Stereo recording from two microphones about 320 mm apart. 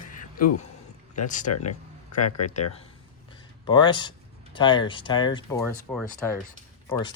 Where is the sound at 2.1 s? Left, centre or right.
Left.